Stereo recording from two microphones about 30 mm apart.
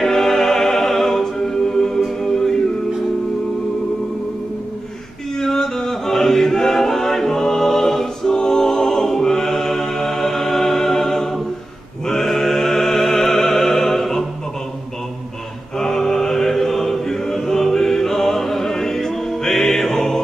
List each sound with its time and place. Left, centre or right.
0.0 s music: centre
5.4 s choir: centre
12.1 s opera: centre
15.8 s chant: centre